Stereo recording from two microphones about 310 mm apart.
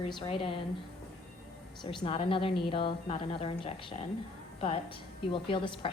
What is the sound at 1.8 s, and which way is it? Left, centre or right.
A woman's voice, centre.